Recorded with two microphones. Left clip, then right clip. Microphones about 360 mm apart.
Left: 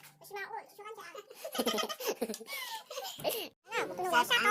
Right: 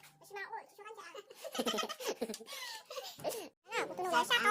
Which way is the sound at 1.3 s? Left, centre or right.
Right.